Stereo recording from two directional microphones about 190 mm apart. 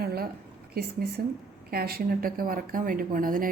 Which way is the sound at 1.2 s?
45° right (ahead or behind).